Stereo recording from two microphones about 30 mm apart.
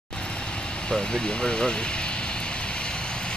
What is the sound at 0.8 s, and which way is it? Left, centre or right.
Speech, left.